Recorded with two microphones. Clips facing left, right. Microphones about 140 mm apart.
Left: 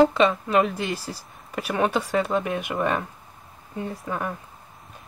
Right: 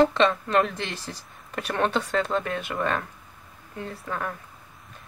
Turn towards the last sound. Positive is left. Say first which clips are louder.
# left 3 dB
turn(degrees=15)  # may be behind; listen again after turning